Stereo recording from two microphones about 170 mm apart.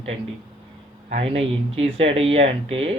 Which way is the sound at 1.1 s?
35° right (ahead or behind).